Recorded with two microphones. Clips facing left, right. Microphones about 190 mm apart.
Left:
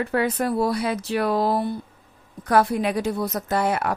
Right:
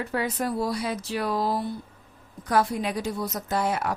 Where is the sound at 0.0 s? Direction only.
60° left (ahead or behind).